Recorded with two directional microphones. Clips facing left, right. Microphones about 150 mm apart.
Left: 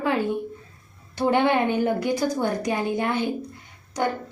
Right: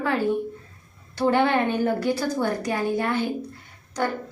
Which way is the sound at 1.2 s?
15° left (ahead or behind).